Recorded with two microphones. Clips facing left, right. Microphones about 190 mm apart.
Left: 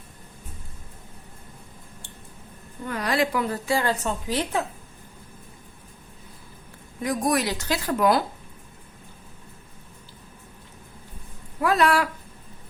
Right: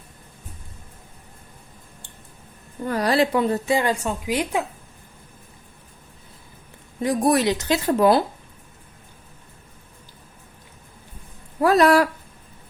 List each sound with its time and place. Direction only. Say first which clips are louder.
2.8 s a woman's voice: right 5 dB; 35° right (ahead or behind); by 4.6 s 10° right (ahead or behind)
7.0 s a woman's voice: right 5 dB; 30° right (ahead or behind)
11.6 s speech: right 5 dB; 40° right (ahead or behind)